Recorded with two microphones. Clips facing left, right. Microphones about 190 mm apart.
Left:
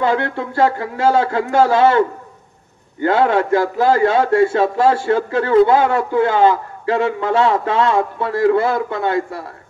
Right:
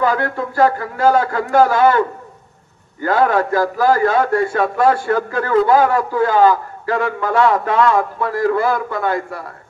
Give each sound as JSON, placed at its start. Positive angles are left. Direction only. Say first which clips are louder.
{"t": 0.0, "sound": "a man's voice", "louder": "even", "side_deg": 25}